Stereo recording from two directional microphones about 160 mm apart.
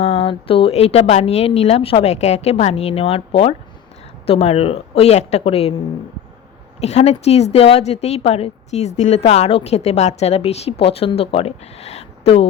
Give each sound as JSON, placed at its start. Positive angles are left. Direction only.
{"t": 0.0, "sound": "speech", "side_deg": 40}
{"t": 6.7, "sound": "speech", "side_deg": 45}